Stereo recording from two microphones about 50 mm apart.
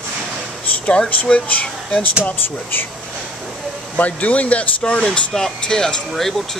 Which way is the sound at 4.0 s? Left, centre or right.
Left.